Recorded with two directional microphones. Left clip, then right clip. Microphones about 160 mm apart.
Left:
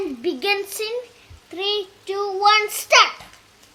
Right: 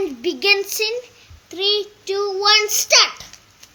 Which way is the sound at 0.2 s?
20° left (ahead or behind).